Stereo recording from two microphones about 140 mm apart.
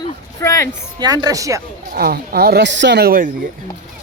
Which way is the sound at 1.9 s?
90° right.